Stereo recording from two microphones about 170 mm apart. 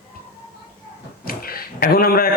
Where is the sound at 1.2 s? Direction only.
60° left (ahead or behind).